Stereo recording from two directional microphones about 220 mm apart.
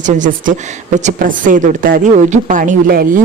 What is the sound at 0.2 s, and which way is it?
Speech, 35° right (ahead or behind).